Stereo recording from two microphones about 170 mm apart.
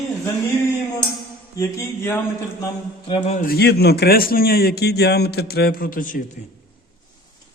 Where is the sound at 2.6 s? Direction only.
30° left (ahead or behind).